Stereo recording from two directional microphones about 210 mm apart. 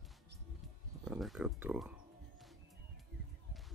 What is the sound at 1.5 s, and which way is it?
Music, 5° right (ahead or behind).